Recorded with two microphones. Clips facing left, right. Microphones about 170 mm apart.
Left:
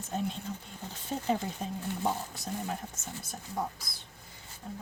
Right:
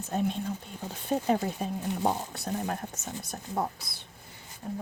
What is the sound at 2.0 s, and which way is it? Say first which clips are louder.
Speech: right 3 dB; 65° right (ahead or behind).